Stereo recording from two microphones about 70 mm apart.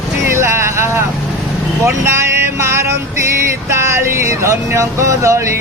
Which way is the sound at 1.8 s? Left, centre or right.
Right.